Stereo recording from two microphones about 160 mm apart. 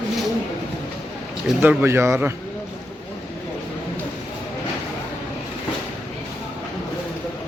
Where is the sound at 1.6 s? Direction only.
15° right (ahead or behind).